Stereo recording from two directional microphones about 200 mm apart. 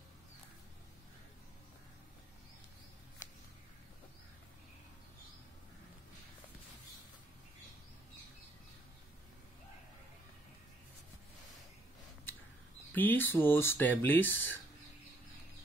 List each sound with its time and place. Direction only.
12.9 s speech: 10° left (ahead or behind)